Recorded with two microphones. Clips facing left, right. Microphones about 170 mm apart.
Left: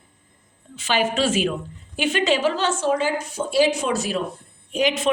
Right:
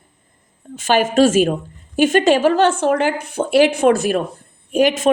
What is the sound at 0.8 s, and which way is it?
A woman's voice, 50° right (ahead or behind).